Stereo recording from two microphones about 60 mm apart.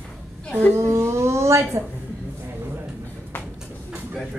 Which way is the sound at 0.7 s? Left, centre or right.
Right.